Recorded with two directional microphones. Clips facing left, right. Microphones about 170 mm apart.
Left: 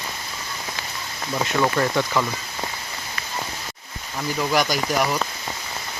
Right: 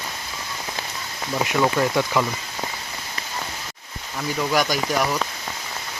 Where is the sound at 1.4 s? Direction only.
10° right (ahead or behind).